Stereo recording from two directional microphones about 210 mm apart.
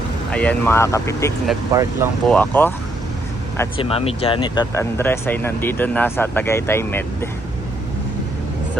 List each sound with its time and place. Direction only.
0.3 s speech: 5° left (ahead or behind)
1.7 s speech: 15° right (ahead or behind)
2.2 s speech: 5° left (ahead or behind)
3.8 s speech: 25° left (ahead or behind); by 7.3 s 10° left (ahead or behind)